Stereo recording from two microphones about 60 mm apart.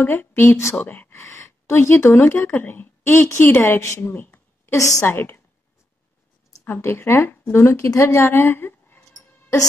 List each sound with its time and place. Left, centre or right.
0.0 s speech: left
0.8 s speech: left
1.1 s speech: left
3.8 s speech: left
4.1 s a sound: left
4.7 s a woman's voice: left
5.0 s a woman's voice: left
6.8 s a woman's voice: left